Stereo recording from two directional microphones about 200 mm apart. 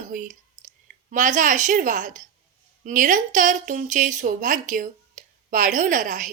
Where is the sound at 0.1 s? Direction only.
40° right (ahead or behind).